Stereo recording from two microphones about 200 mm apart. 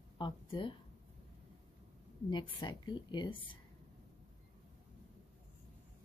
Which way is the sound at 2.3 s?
25° left (ahead or behind).